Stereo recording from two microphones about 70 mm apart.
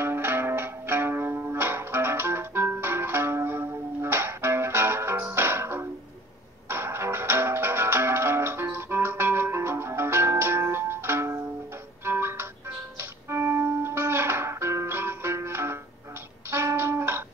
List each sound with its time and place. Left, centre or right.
0.0 s music: right